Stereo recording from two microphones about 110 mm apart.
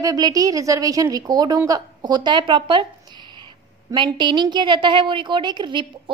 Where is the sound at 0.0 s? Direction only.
35° right (ahead or behind).